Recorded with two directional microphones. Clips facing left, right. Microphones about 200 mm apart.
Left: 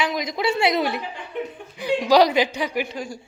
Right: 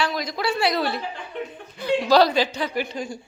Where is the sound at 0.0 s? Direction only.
20° left (ahead or behind).